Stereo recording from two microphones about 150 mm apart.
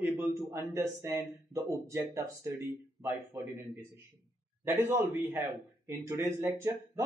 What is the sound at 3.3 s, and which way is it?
Speech, 20° right (ahead or behind).